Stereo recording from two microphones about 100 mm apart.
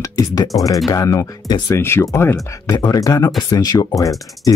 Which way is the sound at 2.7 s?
40° left (ahead or behind).